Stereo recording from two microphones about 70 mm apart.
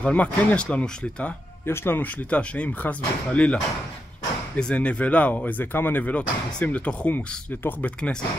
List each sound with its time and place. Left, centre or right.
0.0 s speech: left
1.7 s speech: left
2.3 s speech: centre
4.6 s speech: centre
7.2 s speech: left